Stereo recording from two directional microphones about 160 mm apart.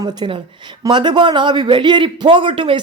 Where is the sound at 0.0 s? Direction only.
25° right (ahead or behind).